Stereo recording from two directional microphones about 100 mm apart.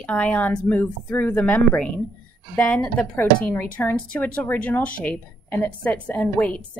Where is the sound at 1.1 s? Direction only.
20° left (ahead or behind).